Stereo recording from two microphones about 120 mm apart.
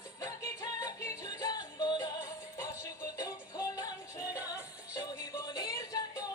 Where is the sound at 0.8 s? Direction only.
25° left (ahead or behind).